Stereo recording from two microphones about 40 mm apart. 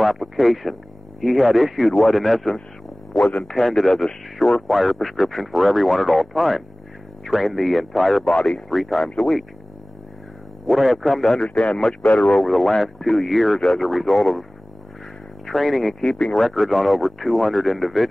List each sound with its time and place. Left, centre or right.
0.0 s speech: centre
8.3 s speech: left
10.7 s speech: centre
11.3 s speech: centre
12.4 s speech: centre
15.4 s speech: centre